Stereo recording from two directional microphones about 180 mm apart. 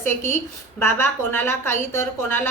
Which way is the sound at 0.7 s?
10° left (ahead or behind).